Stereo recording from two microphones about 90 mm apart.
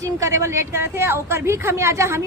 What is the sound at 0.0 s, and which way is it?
A woman's voice, 35° right (ahead or behind).